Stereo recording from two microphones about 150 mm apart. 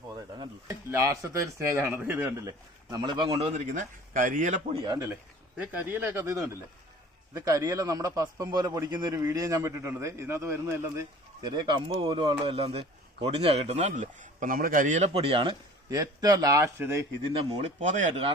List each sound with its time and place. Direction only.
0.1 s speech: 20° right (ahead or behind)
2.9 s speech: 30° right (ahead or behind)
3.7 s speech: 60° right (ahead or behind)
4.8 s a man's voice: 25° right (ahead or behind)
5.5 s a man's voice: 10° right (ahead or behind)
11.4 s a man's voice: 30° right (ahead or behind)
17.7 s speech: 55° right (ahead or behind)